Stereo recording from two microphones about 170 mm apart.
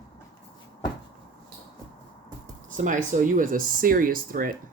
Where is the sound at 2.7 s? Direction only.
50° right (ahead or behind).